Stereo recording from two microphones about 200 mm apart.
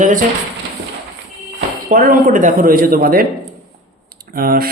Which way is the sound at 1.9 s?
45° right (ahead or behind).